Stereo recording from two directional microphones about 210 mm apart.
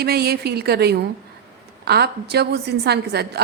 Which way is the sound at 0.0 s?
50° right (ahead or behind).